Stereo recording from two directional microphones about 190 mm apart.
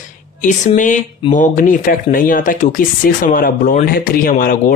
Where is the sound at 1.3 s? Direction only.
45° left (ahead or behind).